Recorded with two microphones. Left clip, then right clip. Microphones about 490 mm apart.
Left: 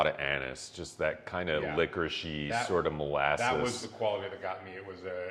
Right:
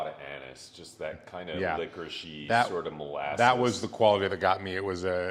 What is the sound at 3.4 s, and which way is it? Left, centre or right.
A man's voice, right.